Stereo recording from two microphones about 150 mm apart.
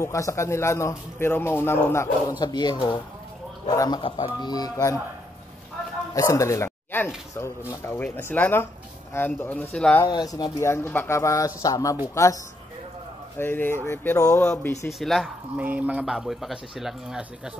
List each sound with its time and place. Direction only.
0.0 s a man's voice: 20° left (ahead or behind)
2.3 s speech: 30° left (ahead or behind)
6.1 s a man's voice: 20° left (ahead or behind)
10.0 s speech: 25° left (ahead or behind)
13.4 s a man's voice: 15° left (ahead or behind)
14.9 s speech: centre (ahead or behind)